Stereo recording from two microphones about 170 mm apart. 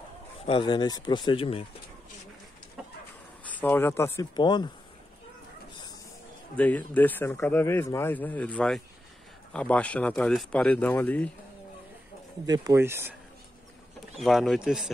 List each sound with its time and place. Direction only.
0.5 s speech: 30° left (ahead or behind)
3.4 s speech: 10° left (ahead or behind)
4.4 s speech: 25° left (ahead or behind)
6.5 s speech: 10° left (ahead or behind)
12.4 s speech: 20° right (ahead or behind)
14.2 s speech: centre (ahead or behind)